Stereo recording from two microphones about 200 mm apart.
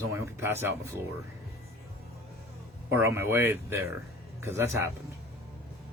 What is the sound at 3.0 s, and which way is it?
Speech, 10° right (ahead or behind).